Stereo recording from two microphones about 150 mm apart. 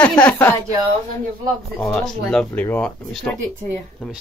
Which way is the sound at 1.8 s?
5° left (ahead or behind).